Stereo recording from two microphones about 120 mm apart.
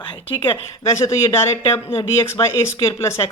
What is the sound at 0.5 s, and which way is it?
Speech, 25° left (ahead or behind).